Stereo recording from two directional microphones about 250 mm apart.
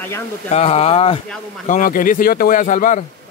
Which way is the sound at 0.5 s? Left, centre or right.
Left.